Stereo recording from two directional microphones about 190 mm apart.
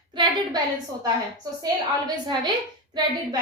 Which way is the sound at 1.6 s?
20° right (ahead or behind).